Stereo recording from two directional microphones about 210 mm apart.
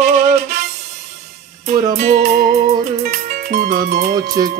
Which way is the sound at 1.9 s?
35° right (ahead or behind).